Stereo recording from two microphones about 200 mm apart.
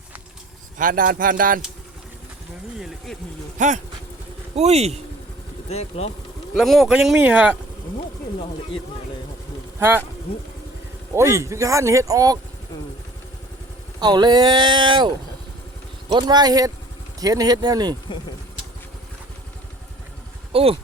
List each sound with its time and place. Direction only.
0.8 s speech: 45° right (ahead or behind)
2.7 s speech: centre (ahead or behind)
3.6 s speech: 40° right (ahead or behind)
5.6 s speech: 30° left (ahead or behind)
6.6 s speech: centre (ahead or behind)
11.1 s speech: 15° right (ahead or behind)
14.0 s speech: 20° right (ahead or behind)
16.1 s speech: 20° right (ahead or behind)
20.5 s speech: 30° right (ahead or behind)